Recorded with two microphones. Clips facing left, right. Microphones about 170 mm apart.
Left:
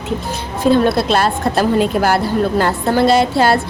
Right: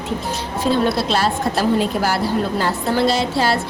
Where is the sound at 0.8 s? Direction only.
55° left (ahead or behind).